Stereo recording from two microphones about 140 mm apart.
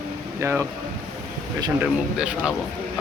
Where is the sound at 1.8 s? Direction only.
5° right (ahead or behind).